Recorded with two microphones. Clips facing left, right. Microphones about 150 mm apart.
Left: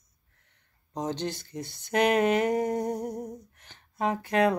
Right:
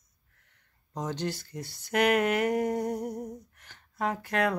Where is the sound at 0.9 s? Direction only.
20° left (ahead or behind).